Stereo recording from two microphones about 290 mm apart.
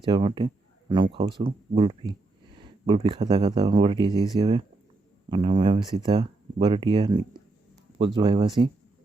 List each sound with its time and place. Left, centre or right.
0.0 s speech: centre